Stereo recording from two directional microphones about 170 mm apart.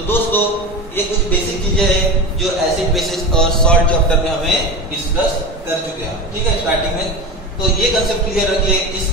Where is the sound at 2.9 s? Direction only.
Centre (ahead or behind).